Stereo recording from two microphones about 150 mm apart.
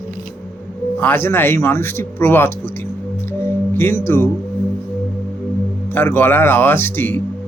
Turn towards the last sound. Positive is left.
turn(degrees=15)  # may be behind; listen again after turning